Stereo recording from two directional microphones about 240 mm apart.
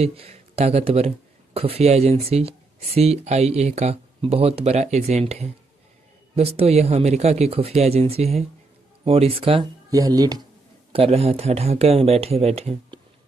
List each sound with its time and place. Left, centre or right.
0.0 s speech: right